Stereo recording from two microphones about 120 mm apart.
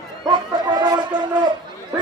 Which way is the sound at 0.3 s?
35° right (ahead or behind).